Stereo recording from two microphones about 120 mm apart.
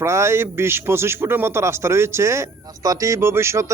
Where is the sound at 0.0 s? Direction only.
20° right (ahead or behind).